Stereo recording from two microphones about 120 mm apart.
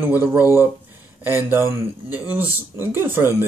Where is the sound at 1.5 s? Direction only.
20° right (ahead or behind).